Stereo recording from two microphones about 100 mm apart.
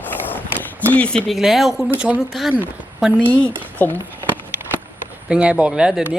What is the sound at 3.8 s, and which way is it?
Speech, 20° left (ahead or behind).